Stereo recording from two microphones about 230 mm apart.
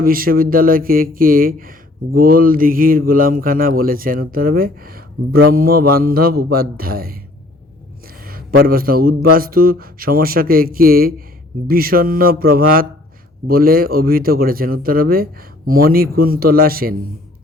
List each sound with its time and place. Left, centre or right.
0.0 s a man's voice: right
8.0 s a sound: right
9.3 s a man's voice: right